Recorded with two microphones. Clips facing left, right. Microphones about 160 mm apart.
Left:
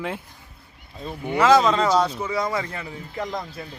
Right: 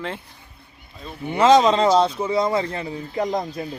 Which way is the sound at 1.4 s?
30° right (ahead or behind).